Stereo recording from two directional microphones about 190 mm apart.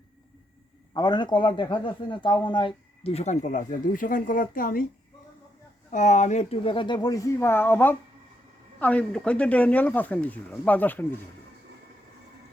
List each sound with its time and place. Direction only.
0.9 s a man's voice: 25° left (ahead or behind); by 4.9 s 50° left (ahead or behind)
5.9 s a man's voice: 40° left (ahead or behind); by 11.0 s 10° left (ahead or behind)